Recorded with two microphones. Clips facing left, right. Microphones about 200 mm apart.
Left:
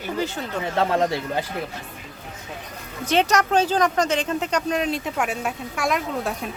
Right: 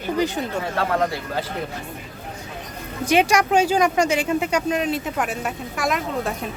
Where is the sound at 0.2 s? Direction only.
15° right (ahead or behind).